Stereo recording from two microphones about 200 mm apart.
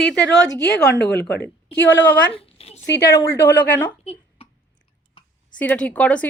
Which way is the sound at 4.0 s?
30° left (ahead or behind).